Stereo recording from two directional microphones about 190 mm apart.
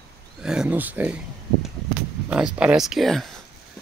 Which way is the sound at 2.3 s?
5° right (ahead or behind).